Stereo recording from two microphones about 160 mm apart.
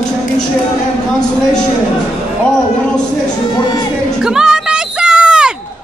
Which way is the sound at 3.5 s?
25° left (ahead or behind).